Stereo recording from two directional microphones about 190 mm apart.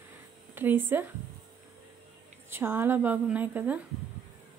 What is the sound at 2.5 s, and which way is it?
A woman's voice, 10° right (ahead or behind).